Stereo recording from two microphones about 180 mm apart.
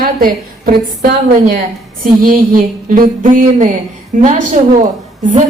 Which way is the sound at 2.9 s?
50° right (ahead or behind).